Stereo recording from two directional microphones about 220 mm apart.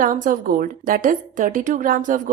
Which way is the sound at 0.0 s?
40° right (ahead or behind).